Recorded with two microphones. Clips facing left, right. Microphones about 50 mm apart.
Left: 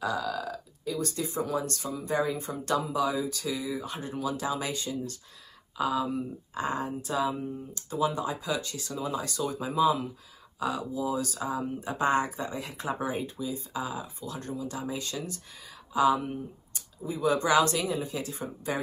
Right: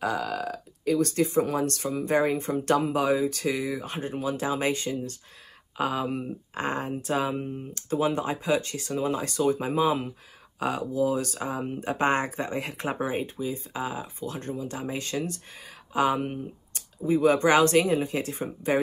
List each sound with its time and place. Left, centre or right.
0.0 s speech: right